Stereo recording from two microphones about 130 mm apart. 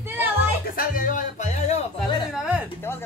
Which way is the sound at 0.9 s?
90° left.